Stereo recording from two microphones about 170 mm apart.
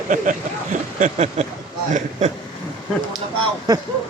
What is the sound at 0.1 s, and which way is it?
Speech, 50° right (ahead or behind).